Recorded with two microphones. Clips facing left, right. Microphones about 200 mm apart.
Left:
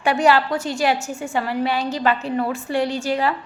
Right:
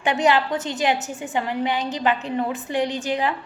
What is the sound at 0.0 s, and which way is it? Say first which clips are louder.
A woman's voice: left 2 dB; 20° right (ahead or behind).